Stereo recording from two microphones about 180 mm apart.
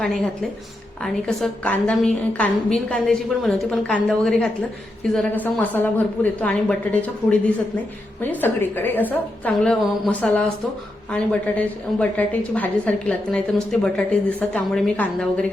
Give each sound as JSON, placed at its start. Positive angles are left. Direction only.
{"t": 1.0, "sound": "a woman's voice", "side_deg": 5}